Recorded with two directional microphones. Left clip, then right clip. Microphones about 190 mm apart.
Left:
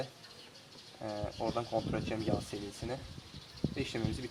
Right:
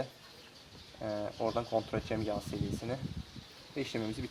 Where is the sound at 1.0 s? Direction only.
35° right (ahead or behind).